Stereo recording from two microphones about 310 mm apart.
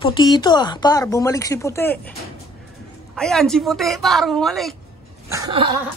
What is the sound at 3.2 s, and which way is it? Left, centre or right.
Speech, centre.